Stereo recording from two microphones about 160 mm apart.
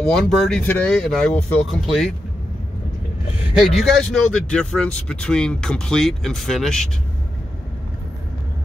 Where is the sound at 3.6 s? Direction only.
Centre (ahead or behind).